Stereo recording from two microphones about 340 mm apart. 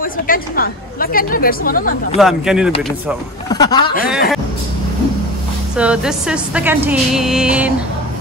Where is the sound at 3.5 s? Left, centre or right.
Centre.